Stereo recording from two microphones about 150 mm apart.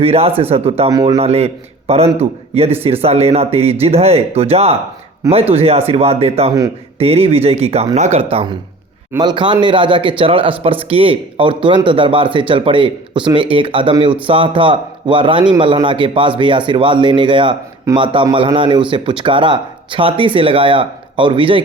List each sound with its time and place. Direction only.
0.0 s speech: 40° right (ahead or behind)